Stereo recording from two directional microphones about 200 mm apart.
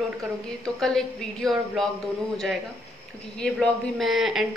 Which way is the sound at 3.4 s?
Centre (ahead or behind).